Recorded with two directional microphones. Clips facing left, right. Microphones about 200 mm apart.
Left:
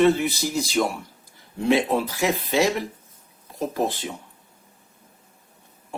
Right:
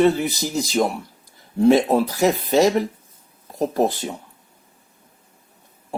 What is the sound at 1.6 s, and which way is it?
Speech, 40° right (ahead or behind).